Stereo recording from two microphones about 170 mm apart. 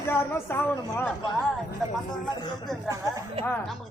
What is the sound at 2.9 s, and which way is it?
Speech, 20° right (ahead or behind).